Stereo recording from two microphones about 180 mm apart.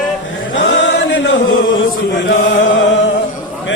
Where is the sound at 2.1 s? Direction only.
85° left.